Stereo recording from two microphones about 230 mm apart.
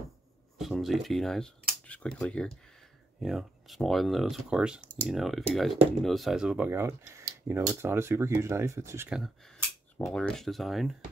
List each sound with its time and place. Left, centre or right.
0.6 s cutlery: centre
3.2 s speech: centre